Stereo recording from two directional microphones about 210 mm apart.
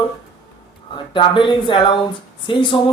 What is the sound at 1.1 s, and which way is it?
A man's voice, 25° left (ahead or behind).